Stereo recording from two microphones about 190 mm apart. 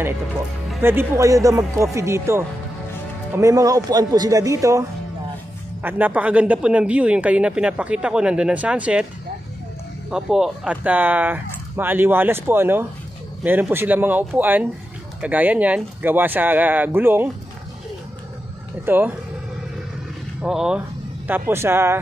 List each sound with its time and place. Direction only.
0.8 s a man's voice: 15° right (ahead or behind)
10.1 s a man's voice: 5° right (ahead or behind)
18.9 s a man's voice: 10° right (ahead or behind)
20.4 s a man's voice: 5° right (ahead or behind)